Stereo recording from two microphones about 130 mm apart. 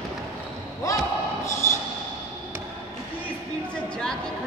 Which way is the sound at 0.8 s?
25° left (ahead or behind).